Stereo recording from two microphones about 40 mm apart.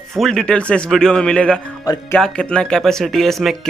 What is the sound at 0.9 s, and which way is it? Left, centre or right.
Speech, centre.